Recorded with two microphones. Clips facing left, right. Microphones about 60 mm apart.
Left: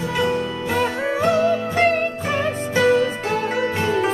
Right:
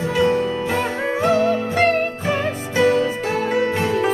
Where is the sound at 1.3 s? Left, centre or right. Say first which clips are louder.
Even; right.